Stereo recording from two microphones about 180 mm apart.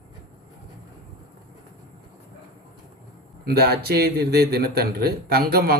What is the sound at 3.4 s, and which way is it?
A man's voice, 60° right (ahead or behind).